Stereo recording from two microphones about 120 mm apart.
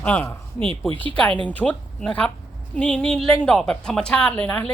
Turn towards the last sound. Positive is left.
turn(degrees=15)  # may be behind; listen again after turning